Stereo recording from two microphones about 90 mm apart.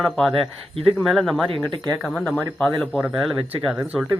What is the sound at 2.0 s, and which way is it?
Speech, centre (ahead or behind).